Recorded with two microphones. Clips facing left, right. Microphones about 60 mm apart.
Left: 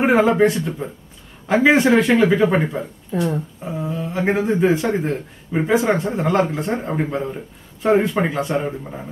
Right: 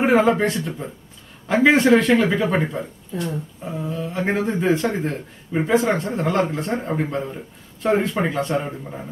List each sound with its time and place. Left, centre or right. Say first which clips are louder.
0.0 s speech: left 2 dB; centre
3.1 s speech: left 6 dB; left
3.6 s speech: right 1 dB; centre